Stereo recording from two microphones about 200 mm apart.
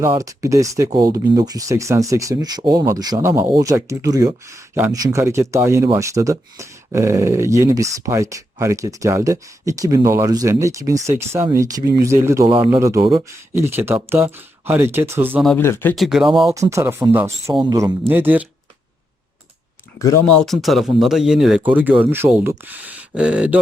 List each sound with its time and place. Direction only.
0.0 s speech: 15° right (ahead or behind)
15.4 s speech: 10° left (ahead or behind)
16.0 s speech: 5° right (ahead or behind)
16.3 s speech: 20° right (ahead or behind)
18.1 s speech: 10° right (ahead or behind)
20.0 s speech: 15° left (ahead or behind)
20.2 s speech: 5° left (ahead or behind)